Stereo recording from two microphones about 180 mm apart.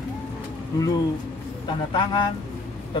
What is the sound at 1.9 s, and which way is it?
Speech, 25° left (ahead or behind).